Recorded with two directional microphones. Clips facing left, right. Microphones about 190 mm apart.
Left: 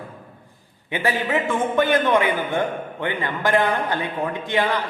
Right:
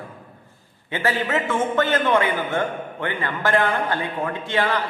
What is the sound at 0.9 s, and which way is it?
A man's voice, 15° left (ahead or behind).